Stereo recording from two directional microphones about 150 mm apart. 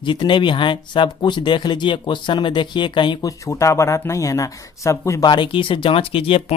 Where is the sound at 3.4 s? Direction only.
20° left (ahead or behind); by 6.5 s 40° left (ahead or behind).